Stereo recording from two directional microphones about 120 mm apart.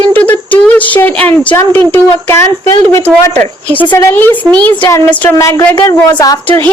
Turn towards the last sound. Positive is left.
turn(degrees=30)  # may be behind; listen again after turning